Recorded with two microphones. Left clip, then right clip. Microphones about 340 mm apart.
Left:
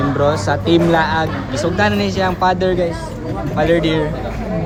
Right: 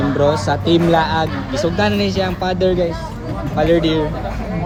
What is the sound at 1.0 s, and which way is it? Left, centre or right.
Speech, centre.